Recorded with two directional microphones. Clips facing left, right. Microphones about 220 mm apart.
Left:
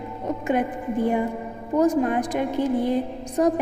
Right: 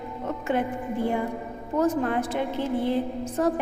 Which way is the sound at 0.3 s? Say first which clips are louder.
Left 3 dB; 15° left (ahead or behind).